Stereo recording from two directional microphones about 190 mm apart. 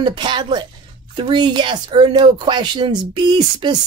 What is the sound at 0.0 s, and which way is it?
Speech, 25° right (ahead or behind).